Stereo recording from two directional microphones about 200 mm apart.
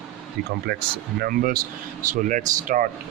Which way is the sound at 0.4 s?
55° right (ahead or behind).